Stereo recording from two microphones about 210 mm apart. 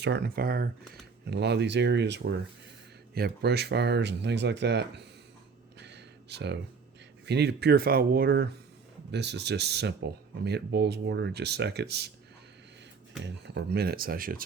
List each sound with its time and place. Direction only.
0.0 s speech: 50° right (ahead or behind)
5.8 s a sound: 55° right (ahead or behind)
7.3 s speech: 55° right (ahead or behind)
13.2 s speech: 55° right (ahead or behind)